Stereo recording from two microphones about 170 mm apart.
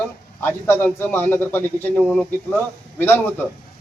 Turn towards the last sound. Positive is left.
turn(degrees=10)  # may be behind; listen again after turning